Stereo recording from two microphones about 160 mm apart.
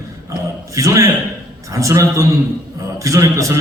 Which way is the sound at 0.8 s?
20° right (ahead or behind).